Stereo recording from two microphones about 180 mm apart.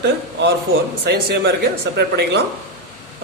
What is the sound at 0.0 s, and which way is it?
A man's voice, 70° right (ahead or behind).